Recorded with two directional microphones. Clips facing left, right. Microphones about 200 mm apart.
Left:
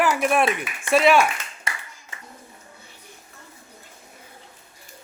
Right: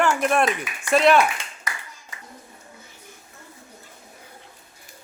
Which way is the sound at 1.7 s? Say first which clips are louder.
Left 1 dB; 25° left (ahead or behind).